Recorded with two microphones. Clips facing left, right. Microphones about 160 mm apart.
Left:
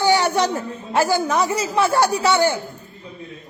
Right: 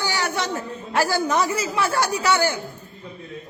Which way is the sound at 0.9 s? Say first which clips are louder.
Left 2 dB; 20° left (ahead or behind).